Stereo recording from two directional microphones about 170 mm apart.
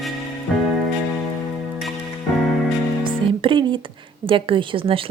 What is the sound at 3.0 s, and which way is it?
Music, 30° right (ahead or behind).